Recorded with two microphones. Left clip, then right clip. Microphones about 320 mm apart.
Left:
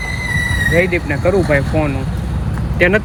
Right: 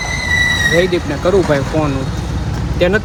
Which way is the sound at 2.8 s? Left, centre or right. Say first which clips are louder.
Left 1 dB; centre.